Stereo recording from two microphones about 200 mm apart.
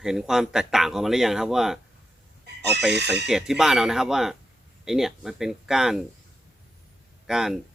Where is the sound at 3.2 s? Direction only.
Centre (ahead or behind).